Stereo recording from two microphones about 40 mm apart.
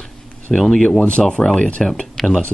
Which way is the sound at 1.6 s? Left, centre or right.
Left.